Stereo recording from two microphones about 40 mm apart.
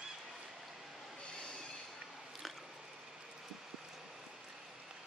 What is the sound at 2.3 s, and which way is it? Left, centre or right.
Biting, centre.